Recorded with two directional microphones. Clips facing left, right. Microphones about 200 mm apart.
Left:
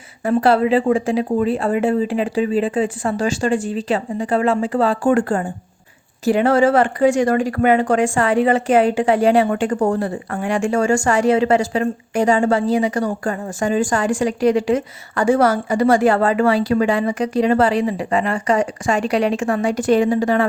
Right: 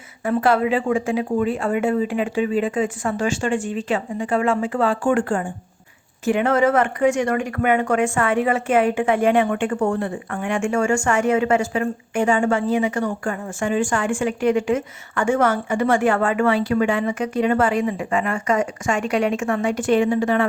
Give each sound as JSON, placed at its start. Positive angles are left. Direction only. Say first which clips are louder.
{"t": 0.3, "sound": "a woman's voice", "louder": "left 3 dB", "side_deg": 35}